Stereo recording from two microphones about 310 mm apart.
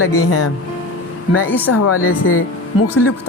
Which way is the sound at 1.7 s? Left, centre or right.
Left.